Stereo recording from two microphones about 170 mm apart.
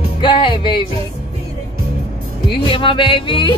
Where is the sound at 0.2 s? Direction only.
30° left (ahead or behind).